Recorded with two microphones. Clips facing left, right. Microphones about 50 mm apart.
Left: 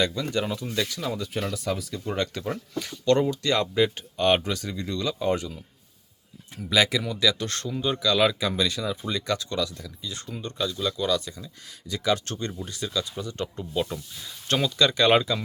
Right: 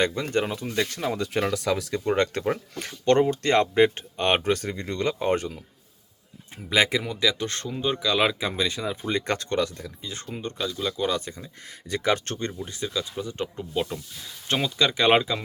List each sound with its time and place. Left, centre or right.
0.0 s speech: right
1.2 s speech: right
1.5 s speech: right
6.6 s speech: right
12.5 s speech: right